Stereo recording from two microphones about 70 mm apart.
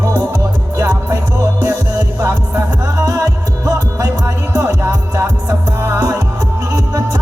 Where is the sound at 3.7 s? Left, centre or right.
Right.